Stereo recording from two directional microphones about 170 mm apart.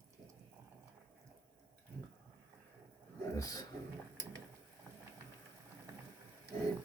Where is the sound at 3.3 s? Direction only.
20° left (ahead or behind).